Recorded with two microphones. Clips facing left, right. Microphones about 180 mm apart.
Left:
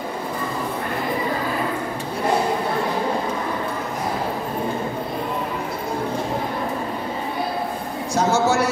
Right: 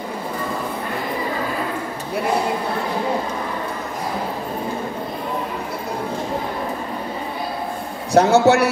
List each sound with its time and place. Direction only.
8.1 s a man's voice: 65° right (ahead or behind)